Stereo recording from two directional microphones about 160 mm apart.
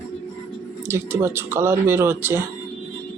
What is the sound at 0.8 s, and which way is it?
Speech, 15° right (ahead or behind).